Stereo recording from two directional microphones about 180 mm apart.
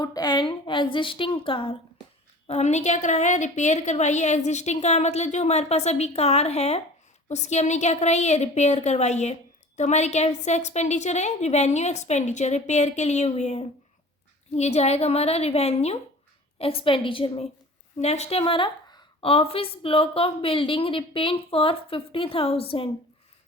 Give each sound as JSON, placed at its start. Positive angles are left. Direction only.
{"t": 0.0, "sound": "a woman's voice", "side_deg": 20}